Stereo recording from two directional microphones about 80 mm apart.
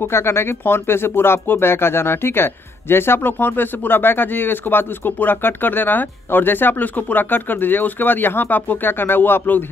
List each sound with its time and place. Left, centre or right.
0.0 s speech: left